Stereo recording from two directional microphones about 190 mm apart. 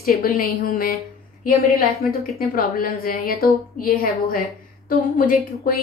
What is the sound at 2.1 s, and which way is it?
A woman's voice, 50° left (ahead or behind).